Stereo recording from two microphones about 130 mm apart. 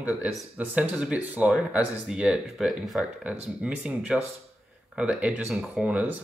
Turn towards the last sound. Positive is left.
turn(degrees=-10)  # may be behind; listen again after turning